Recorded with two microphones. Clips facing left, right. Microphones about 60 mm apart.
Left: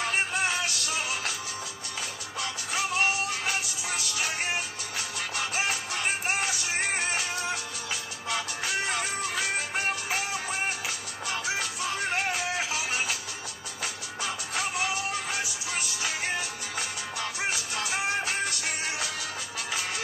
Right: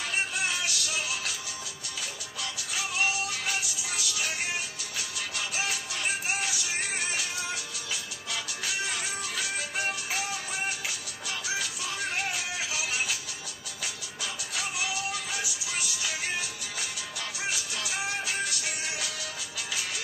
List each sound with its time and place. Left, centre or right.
0.0 s music: left
2.4 s music: left
14.2 s music: left